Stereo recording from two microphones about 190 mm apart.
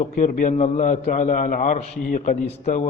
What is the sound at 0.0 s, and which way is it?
A man's voice, 40° left (ahead or behind).